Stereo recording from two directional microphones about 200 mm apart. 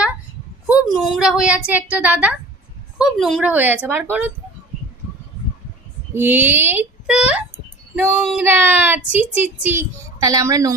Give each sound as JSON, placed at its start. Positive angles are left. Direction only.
{"t": 0.7, "sound": "a woman's voice", "side_deg": 0}
{"t": 6.1, "sound": "speech", "side_deg": -10}